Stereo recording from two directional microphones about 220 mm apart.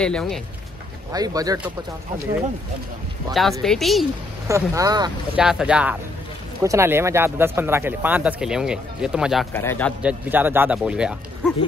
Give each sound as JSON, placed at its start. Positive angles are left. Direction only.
{"t": 0.0, "sound": "speech", "side_deg": 5}
{"t": 1.1, "sound": "speech", "side_deg": -15}
{"t": 3.6, "sound": "speech", "side_deg": 0}
{"t": 4.5, "sound": "speech", "side_deg": -15}
{"t": 5.3, "sound": "a man's voice", "side_deg": -5}
{"t": 10.0, "sound": "speech", "side_deg": -10}